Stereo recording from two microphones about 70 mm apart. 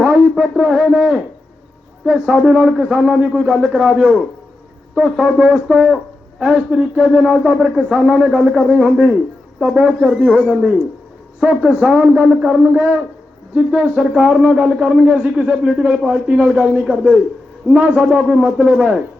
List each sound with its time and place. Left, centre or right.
0.0 s a man's voice: centre
2.2 s a man's voice: centre
15.4 s a man's voice: centre